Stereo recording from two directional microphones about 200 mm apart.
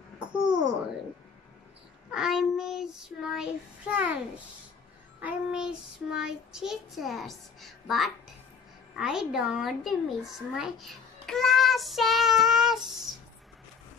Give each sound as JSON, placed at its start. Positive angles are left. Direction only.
{"t": 0.4, "sound": "a sound", "side_deg": -20}
{"t": 2.0, "sound": "child singing", "side_deg": -5}
{"t": 5.2, "sound": "child singing", "side_deg": -5}
{"t": 8.9, "sound": "speech", "side_deg": -5}